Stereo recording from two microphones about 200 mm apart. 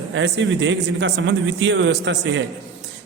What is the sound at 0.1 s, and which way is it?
A man's voice, 65° right (ahead or behind).